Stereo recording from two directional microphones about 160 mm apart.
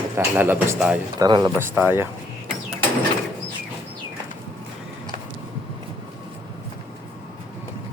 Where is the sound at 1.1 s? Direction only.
25° right (ahead or behind).